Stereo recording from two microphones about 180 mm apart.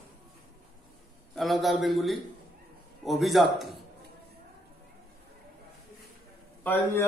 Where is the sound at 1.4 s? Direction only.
Centre (ahead or behind).